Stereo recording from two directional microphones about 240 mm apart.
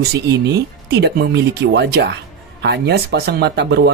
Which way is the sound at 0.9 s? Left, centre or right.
Right.